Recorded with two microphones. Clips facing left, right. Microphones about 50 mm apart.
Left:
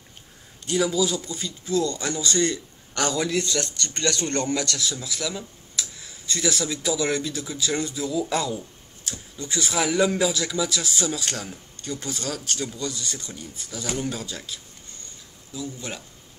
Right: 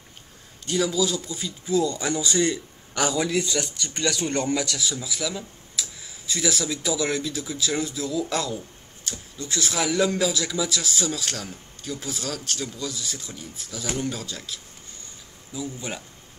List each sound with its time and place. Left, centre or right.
0.6 s speech: centre
15.5 s speech: centre